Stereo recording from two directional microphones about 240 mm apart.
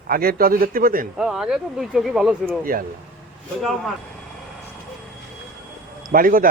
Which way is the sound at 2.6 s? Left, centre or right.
Right.